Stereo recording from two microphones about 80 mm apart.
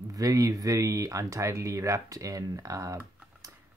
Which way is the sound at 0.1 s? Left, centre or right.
Right.